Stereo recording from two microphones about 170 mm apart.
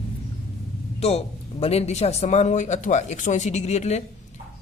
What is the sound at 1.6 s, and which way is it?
Speech, 40° left (ahead or behind).